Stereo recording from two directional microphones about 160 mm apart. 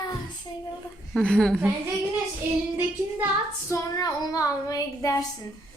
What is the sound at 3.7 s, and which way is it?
Child singing, 25° left (ahead or behind).